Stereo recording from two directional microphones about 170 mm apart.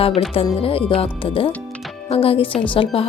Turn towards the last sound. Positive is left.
turn(degrees=35)  # may be behind; listen again after turning